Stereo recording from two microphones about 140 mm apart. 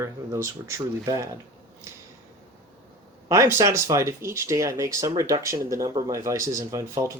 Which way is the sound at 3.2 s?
25° right (ahead or behind).